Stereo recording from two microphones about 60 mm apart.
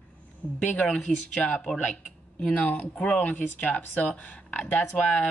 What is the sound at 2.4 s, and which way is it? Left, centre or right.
Speech, left.